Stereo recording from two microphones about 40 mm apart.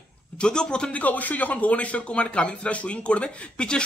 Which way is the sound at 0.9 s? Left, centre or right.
Left.